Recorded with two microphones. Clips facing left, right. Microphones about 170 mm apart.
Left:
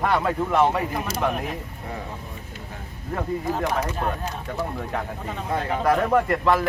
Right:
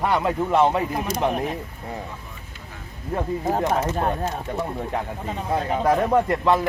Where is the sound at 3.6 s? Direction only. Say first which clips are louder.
Right 3 dB; 25° right (ahead or behind).